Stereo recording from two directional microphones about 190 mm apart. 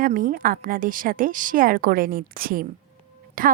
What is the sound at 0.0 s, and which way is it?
A woman's voice, 45° right (ahead or behind).